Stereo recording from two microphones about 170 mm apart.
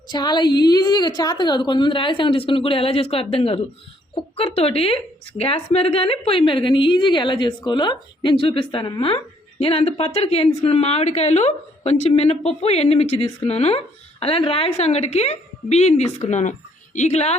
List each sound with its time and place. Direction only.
0.1 s a woman's voice: 25° left (ahead or behind)